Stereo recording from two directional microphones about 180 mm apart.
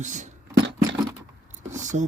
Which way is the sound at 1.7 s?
40° right (ahead or behind).